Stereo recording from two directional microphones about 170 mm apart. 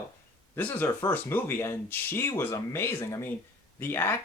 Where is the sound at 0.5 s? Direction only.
10° left (ahead or behind).